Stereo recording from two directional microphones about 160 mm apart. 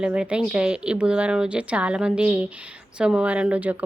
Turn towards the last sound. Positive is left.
turn(degrees=-10)  # may be behind; listen again after turning